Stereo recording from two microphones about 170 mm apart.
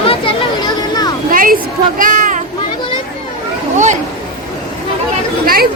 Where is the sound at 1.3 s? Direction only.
55° right (ahead or behind).